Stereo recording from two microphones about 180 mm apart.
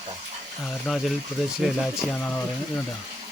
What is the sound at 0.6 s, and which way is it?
Speech, centre (ahead or behind).